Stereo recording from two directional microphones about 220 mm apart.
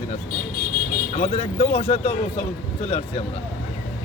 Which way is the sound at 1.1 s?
30° left (ahead or behind).